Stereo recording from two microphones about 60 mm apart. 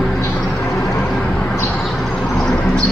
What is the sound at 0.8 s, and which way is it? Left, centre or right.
Vehicle, left.